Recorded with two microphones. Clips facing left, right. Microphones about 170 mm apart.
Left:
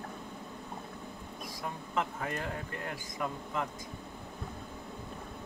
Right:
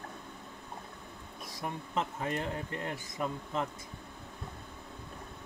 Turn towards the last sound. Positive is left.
turn(degrees=-25)  # may be behind; listen again after turning